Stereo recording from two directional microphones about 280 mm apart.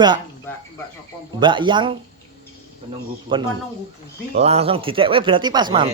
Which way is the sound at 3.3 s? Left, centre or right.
Centre.